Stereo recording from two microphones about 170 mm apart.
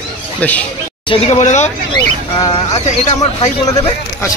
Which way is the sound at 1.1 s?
35° left (ahead or behind).